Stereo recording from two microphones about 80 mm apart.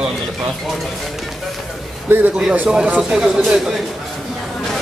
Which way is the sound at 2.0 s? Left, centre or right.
Right.